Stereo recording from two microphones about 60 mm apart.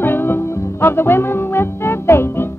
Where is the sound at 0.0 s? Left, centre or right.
Left.